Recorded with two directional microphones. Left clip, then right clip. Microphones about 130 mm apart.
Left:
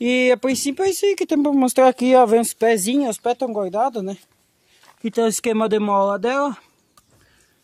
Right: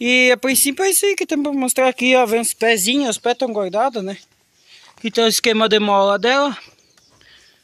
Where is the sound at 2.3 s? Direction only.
45° left (ahead or behind).